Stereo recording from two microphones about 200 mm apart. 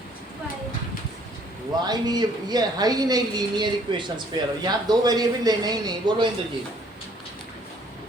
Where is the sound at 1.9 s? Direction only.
20° right (ahead or behind).